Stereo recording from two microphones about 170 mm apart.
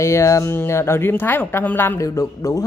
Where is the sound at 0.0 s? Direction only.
15° left (ahead or behind).